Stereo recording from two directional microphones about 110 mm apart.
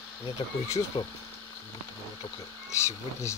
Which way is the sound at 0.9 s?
45° left (ahead or behind).